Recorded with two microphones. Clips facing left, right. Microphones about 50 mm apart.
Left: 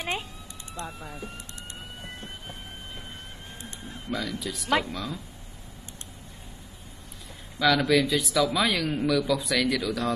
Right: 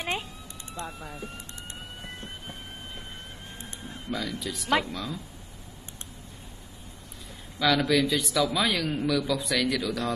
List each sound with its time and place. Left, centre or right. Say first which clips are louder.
0.0 s music: even; centre
0.8 s speech: even; centre
1.8 s emergency vehicle: even; centre
3.6 s speech: even; centre
7.5 s speech: left 2 dB; centre